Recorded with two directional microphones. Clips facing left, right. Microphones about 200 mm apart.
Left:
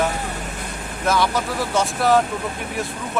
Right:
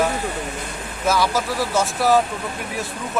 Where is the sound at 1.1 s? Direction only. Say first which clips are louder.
Even; centre (ahead or behind).